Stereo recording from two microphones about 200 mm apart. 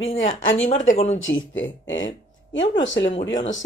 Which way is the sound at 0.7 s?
40° left (ahead or behind).